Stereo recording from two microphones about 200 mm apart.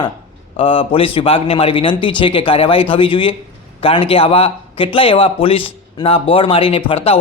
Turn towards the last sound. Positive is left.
turn(degrees=30)  # may be behind; listen again after turning